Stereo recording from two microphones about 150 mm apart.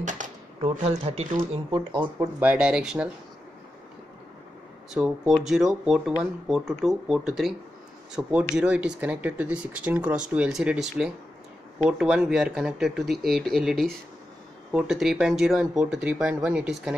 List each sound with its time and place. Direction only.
0.0 s speech: 50° right (ahead or behind); by 2.0 s 30° right (ahead or behind)
2.1 s speech: 10° right (ahead or behind)
4.9 s speech: 5° right (ahead or behind)